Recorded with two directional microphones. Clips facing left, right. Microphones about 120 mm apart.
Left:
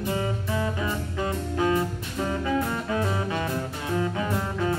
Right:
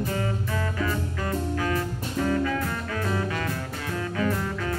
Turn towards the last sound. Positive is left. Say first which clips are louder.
# even
turn(degrees=20)  # may be behind; listen again after turning